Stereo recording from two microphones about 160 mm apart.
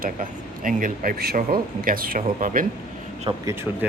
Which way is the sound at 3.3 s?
30° right (ahead or behind).